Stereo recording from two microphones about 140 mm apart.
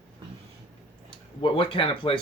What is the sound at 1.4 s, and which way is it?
Speech, 35° left (ahead or behind).